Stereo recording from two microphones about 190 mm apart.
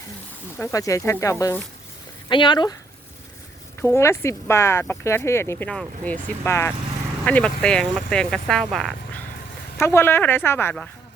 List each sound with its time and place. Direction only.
0.5 s speech: 15° left (ahead or behind)
3.9 s speech: 15° left (ahead or behind)
9.8 s speech: 15° left (ahead or behind)